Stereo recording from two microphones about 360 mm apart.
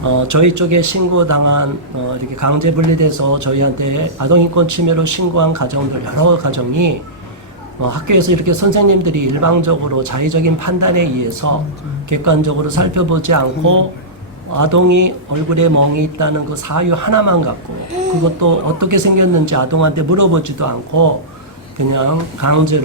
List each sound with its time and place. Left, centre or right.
0.0 s a man's voice: right